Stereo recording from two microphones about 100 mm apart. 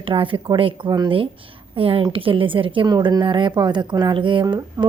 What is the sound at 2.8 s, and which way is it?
Speech, 40° right (ahead or behind).